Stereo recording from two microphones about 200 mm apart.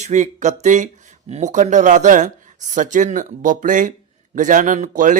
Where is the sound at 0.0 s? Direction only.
35° right (ahead or behind).